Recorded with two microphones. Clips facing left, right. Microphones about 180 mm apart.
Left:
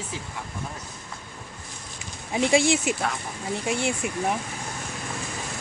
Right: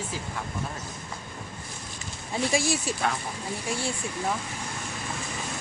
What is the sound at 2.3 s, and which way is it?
Speech, 25° left (ahead or behind).